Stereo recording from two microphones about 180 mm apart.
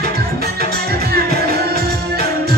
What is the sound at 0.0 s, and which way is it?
Music, 60° right (ahead or behind).